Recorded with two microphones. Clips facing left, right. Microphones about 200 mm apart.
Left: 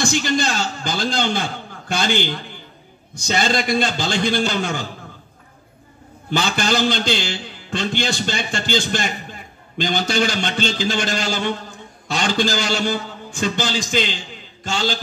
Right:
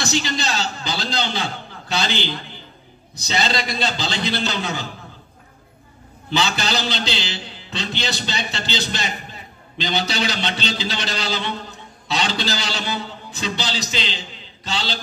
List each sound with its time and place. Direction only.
0.0 s a man's voice: 50° left (ahead or behind)
6.3 s a man's voice: 50° left (ahead or behind)